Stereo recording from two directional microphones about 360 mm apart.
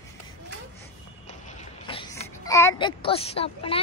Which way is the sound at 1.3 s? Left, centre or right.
Centre.